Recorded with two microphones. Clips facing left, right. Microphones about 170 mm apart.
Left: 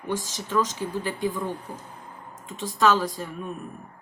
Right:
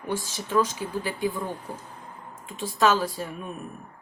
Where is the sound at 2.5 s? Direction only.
10° right (ahead or behind).